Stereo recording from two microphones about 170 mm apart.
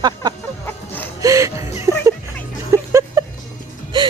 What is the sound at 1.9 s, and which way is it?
Music, 15° right (ahead or behind).